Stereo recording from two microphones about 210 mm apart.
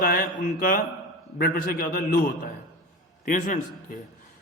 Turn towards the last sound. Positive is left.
turn(degrees=40)  # may be behind; listen again after turning